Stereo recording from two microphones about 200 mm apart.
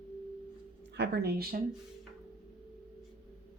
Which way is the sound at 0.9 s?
55° right (ahead or behind).